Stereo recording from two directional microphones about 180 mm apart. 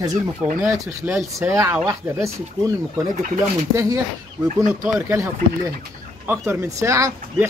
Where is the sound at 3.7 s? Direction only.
15° right (ahead or behind).